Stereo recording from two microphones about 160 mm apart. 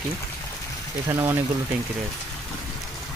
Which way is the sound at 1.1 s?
15° right (ahead or behind).